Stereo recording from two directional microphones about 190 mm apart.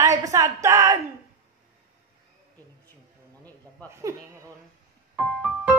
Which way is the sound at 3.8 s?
10° left (ahead or behind).